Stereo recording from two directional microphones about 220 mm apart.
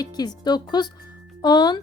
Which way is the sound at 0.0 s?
20° left (ahead or behind).